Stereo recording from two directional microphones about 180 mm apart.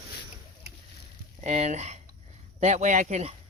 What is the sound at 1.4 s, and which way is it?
Speech, 40° right (ahead or behind).